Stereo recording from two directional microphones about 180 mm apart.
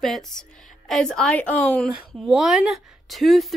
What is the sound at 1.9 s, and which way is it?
A woman's voice, 5° right (ahead or behind).